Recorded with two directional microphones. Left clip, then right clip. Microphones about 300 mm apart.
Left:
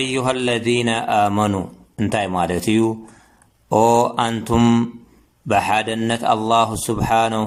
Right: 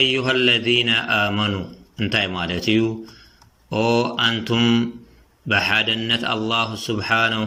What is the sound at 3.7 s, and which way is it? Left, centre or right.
Mantra, centre.